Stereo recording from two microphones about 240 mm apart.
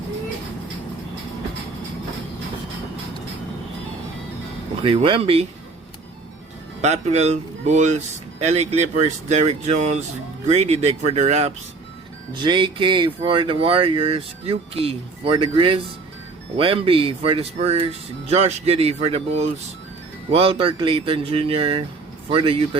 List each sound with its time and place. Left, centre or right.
4.8 s speech: right
6.8 s speech: right